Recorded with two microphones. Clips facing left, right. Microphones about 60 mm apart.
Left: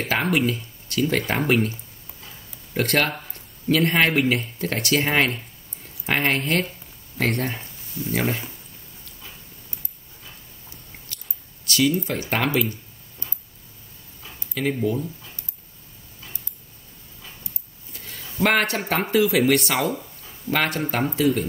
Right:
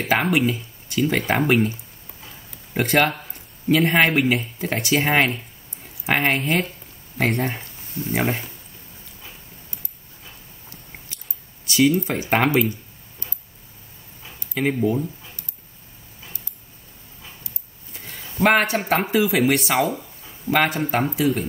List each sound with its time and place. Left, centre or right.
0.2 s speech: centre
2.7 s speech: centre
8.0 s speech: right
11.6 s a sound: centre
12.1 s speech: centre
14.5 s speech: right
17.9 s a sound: centre
18.3 s speech: centre